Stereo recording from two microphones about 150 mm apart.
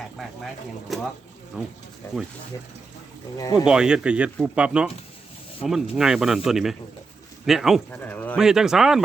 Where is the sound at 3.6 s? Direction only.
5° right (ahead or behind).